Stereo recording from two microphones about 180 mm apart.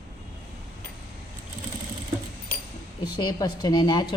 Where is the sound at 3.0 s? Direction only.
25° left (ahead or behind).